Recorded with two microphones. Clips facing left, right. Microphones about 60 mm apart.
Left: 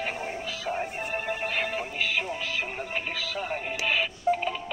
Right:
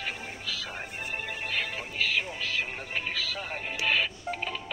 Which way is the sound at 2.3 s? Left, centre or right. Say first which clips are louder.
Left 1 dB; centre.